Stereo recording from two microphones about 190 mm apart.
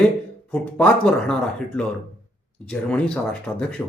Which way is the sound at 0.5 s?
5° left (ahead or behind).